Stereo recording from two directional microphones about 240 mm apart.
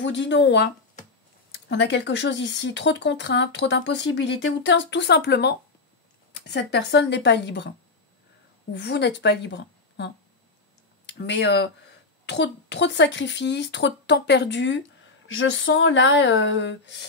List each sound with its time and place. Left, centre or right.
0.0 s speech: left
8.7 s speech: left